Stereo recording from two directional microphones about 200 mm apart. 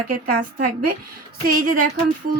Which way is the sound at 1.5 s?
45° right (ahead or behind).